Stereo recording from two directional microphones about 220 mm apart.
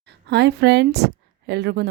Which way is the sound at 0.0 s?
50° right (ahead or behind).